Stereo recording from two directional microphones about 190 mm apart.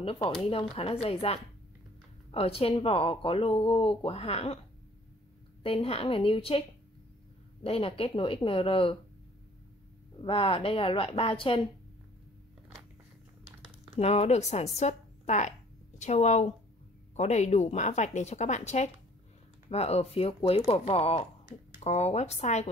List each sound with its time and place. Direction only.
0.0 s speech: 30° left (ahead or behind)
5.6 s speech: 30° left (ahead or behind)
7.6 s speech: 30° left (ahead or behind)
10.2 s speech: 30° left (ahead or behind)
13.9 s speech: 35° left (ahead or behind)